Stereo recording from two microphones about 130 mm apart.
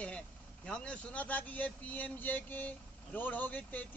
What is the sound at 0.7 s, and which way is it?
Speech, 5° left (ahead or behind).